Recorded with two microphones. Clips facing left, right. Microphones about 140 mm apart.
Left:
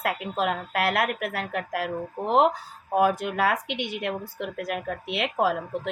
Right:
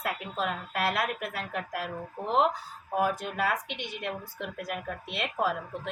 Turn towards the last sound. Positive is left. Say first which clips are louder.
# left 5 dB
turn(degrees=80)